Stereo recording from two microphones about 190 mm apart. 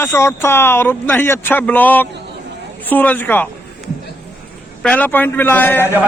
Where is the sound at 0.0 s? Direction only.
15° left (ahead or behind).